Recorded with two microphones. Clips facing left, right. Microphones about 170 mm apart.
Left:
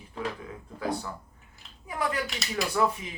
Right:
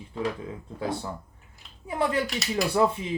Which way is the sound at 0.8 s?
25° right (ahead or behind).